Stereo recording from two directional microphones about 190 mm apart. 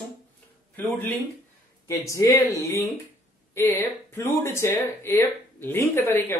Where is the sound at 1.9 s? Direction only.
15° left (ahead or behind).